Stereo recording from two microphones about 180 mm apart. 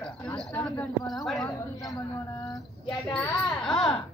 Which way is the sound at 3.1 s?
5° left (ahead or behind).